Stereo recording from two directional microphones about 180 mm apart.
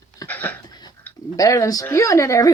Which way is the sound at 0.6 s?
20° left (ahead or behind).